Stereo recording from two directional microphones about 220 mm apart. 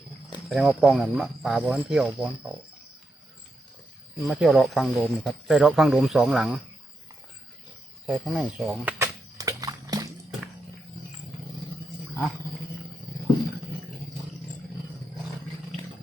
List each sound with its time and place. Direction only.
0.4 s speech: 5° right (ahead or behind)
4.2 s speech: centre (ahead or behind)
8.0 s a sound: 5° right (ahead or behind)